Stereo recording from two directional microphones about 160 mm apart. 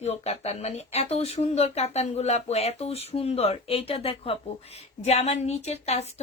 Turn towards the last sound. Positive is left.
turn(degrees=40)  # may be behind; listen again after turning